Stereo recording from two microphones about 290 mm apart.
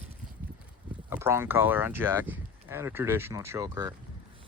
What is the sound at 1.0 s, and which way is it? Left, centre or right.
Speech, centre.